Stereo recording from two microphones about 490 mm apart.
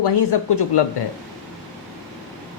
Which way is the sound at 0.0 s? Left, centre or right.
Left.